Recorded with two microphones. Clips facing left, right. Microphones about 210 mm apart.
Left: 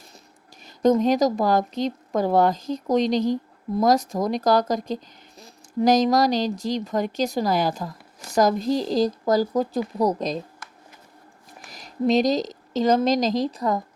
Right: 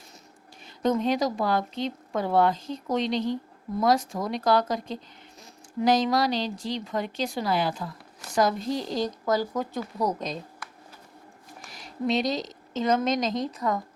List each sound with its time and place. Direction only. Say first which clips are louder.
0.6 s a woman's voice: left 6 dB; 40° left (ahead or behind)
11.7 s a woman's voice: left 6 dB; 40° left (ahead or behind)